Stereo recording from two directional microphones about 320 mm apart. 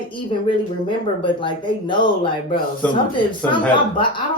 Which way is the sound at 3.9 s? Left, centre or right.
Centre.